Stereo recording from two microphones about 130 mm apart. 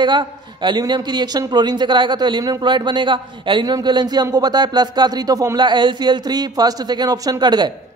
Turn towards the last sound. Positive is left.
turn(degrees=-35)  # may be behind; listen again after turning